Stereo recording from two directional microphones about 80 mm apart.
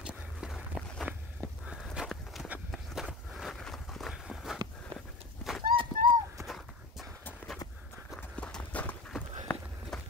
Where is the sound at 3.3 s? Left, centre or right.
Centre.